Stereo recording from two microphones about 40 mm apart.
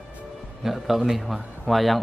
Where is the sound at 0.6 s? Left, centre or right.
Centre.